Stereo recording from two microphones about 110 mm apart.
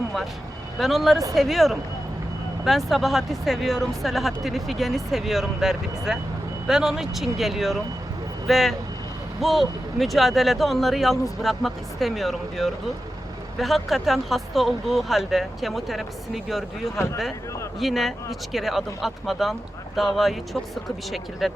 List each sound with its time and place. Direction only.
0.8 s speech: centre (ahead or behind)
17.0 s speech: 25° left (ahead or behind)
17.7 s speech: centre (ahead or behind)